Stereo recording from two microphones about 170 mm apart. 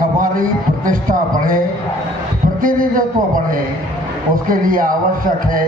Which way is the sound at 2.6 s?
55° right (ahead or behind).